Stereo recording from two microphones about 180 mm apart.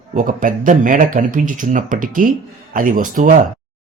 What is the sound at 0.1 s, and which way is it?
Speech, 45° right (ahead or behind).